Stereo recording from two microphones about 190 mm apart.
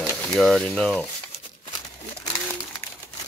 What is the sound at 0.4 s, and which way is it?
Speech, centre (ahead or behind).